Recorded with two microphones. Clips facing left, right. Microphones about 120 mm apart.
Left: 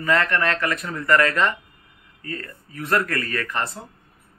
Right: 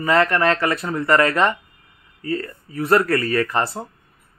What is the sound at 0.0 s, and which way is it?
Speech, 30° right (ahead or behind).